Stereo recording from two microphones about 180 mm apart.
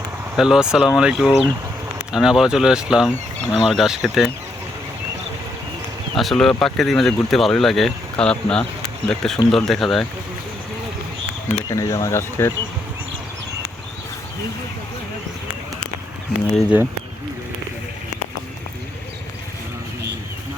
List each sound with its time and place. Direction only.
0.3 s speech: 5° right (ahead or behind)
6.1 s speech: centre (ahead or behind)
11.7 s speech: 20° left (ahead or behind)
16.5 s speech: centre (ahead or behind)